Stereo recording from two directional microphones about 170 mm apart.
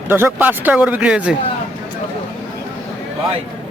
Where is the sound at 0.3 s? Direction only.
10° right (ahead or behind).